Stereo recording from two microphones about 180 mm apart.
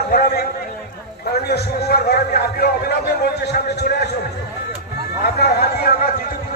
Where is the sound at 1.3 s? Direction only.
60° left (ahead or behind).